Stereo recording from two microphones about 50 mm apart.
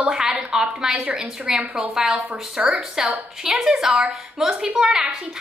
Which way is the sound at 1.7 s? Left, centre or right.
Centre.